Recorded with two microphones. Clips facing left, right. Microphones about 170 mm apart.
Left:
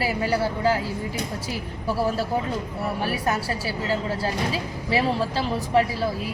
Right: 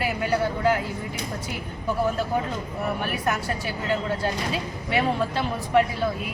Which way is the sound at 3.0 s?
30° left (ahead or behind).